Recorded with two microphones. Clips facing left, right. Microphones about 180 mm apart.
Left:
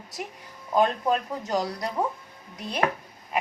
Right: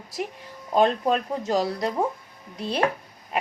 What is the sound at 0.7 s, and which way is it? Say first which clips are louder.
A woman's voice: right 2 dB; 25° right (ahead or behind).